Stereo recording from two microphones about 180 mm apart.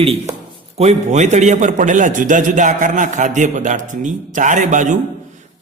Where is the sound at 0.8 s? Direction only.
40° right (ahead or behind).